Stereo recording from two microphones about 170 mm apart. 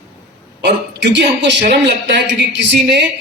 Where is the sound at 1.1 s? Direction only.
90° right.